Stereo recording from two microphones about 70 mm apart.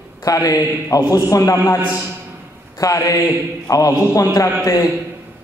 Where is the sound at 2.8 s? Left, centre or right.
Left.